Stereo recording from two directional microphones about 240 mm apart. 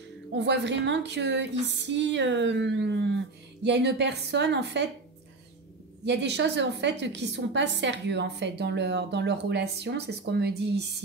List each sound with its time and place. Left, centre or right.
0.4 s a woman's voice: right
6.0 s a woman's voice: right